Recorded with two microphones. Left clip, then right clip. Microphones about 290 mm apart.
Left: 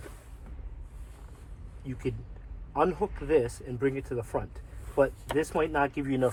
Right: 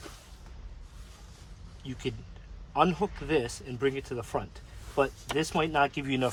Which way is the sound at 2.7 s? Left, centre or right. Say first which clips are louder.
Right 1 dB; right.